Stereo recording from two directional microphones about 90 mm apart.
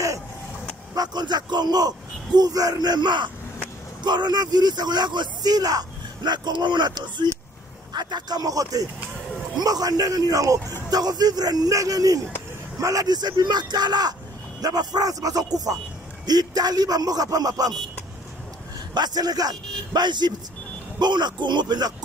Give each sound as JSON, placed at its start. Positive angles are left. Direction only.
{"t": 0.9, "sound": "a man's voice", "side_deg": -50}
{"t": 18.9, "sound": "a man's voice", "side_deg": -50}